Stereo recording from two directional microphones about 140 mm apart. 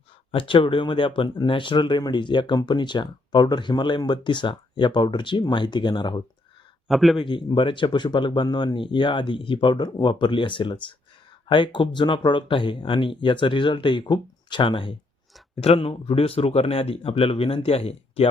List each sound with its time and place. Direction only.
0.3 s speech: 35° left (ahead or behind)
6.8 s speech: centre (ahead or behind)
7.2 s speech: 35° left (ahead or behind)